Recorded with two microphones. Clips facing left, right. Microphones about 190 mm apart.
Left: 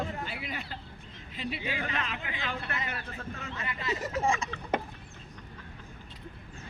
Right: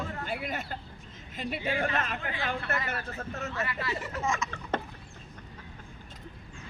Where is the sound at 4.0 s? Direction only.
40° left (ahead or behind).